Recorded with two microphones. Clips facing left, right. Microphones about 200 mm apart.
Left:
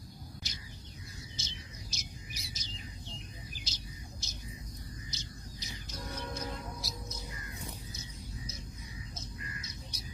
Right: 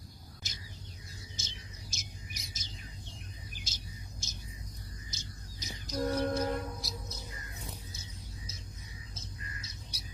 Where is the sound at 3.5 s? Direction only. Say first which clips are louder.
Left 1 dB; 50° right (ahead or behind).